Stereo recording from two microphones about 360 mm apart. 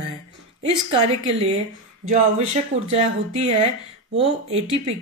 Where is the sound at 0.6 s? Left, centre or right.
Centre.